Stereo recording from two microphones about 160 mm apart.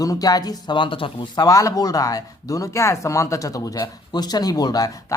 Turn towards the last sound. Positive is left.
turn(degrees=20)  # may be behind; listen again after turning